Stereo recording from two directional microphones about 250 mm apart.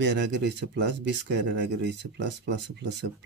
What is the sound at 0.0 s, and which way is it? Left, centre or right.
Speech, right.